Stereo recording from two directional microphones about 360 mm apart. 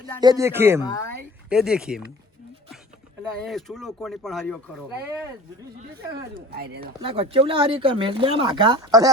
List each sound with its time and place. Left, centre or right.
0.2 s speech: centre
3.4 s speech: centre
6.5 s speech: right
7.0 s speech: centre